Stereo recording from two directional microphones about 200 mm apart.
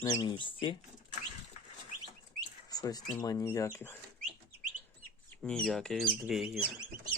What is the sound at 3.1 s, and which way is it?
Speech, 15° left (ahead or behind).